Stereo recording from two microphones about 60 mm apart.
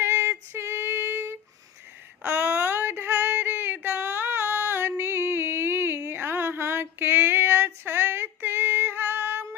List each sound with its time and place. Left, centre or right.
0.0 s female singing: right